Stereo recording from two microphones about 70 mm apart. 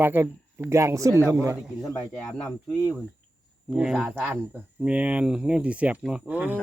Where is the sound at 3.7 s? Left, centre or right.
Centre.